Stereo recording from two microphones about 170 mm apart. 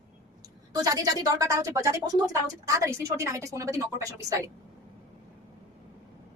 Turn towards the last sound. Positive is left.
turn(degrees=-20)  # may be behind; listen again after turning